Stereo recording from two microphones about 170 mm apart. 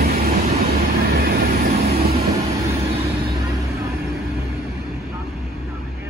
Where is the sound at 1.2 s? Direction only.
70° right (ahead or behind).